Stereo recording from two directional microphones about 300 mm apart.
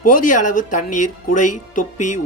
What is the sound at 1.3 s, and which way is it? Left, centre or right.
Speech, left.